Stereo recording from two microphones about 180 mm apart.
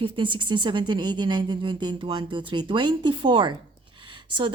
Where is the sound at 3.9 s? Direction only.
30° right (ahead or behind).